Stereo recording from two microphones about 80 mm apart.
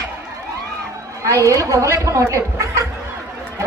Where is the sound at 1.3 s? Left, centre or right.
Right.